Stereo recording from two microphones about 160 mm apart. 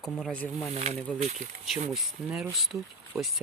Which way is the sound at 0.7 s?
40° right (ahead or behind).